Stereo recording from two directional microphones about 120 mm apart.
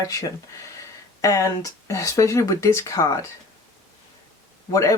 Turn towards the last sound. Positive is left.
turn(degrees=25)  # may be behind; listen again after turning